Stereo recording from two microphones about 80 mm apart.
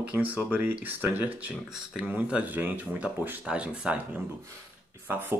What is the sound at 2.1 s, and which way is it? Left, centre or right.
Speech, right.